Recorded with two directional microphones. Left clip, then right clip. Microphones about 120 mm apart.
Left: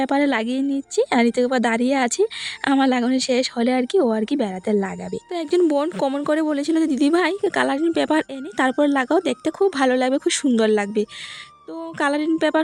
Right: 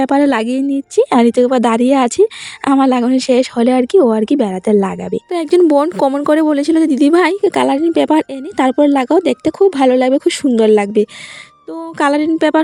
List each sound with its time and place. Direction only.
0.0 s a woman's voice: 40° right (ahead or behind)